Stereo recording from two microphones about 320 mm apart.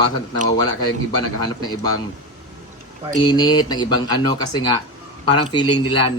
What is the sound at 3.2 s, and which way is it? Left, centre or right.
Speech, centre.